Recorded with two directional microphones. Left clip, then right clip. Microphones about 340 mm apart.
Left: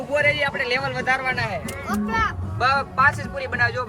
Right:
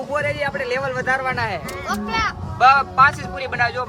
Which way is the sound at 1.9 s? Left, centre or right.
Right.